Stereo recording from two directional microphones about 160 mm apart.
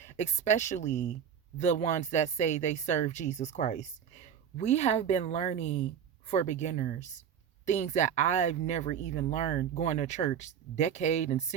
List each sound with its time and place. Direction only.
0.0 s a woman's voice: 45° left (ahead or behind)